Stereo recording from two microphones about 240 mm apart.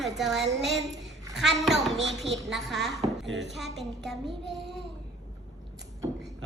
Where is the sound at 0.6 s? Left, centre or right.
Centre.